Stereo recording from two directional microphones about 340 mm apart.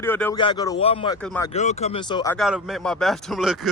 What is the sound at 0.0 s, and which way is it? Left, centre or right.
Speech, centre.